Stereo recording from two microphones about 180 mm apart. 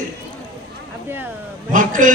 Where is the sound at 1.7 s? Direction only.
45° right (ahead or behind).